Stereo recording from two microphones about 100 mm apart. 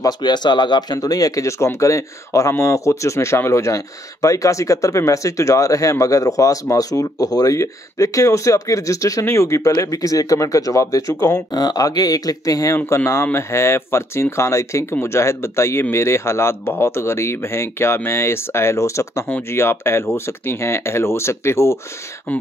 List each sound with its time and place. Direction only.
0.0 s speech: 45° left (ahead or behind); by 21.7 s 25° left (ahead or behind)
22.3 s speech: 15° left (ahead or behind)